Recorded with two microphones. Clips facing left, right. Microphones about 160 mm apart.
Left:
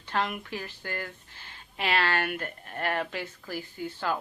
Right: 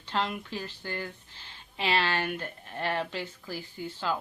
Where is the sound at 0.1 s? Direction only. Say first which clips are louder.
Left 1 dB; 25° right (ahead or behind).